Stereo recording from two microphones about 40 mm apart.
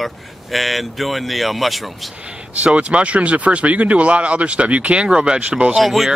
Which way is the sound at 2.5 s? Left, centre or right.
Right.